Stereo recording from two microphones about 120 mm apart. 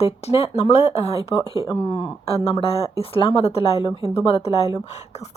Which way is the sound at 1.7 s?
45° left (ahead or behind).